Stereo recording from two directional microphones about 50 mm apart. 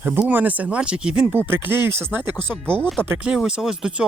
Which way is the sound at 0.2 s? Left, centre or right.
Right.